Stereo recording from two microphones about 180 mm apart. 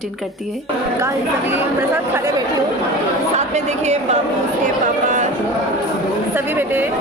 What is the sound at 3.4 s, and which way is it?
Speech, 40° right (ahead or behind).